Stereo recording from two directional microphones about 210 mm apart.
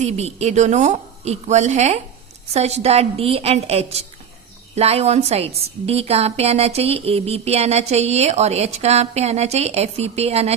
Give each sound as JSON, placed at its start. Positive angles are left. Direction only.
{"t": 0.0, "sound": "a woman's voice", "side_deg": -30}